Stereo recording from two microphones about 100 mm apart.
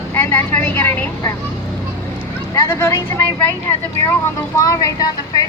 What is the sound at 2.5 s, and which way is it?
Speech, 30° left (ahead or behind).